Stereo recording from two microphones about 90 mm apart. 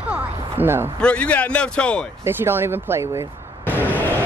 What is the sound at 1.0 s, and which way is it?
A man's voice, 15° left (ahead or behind).